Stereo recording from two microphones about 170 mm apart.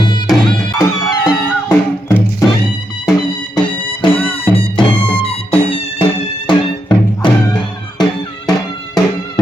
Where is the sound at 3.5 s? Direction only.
25° left (ahead or behind).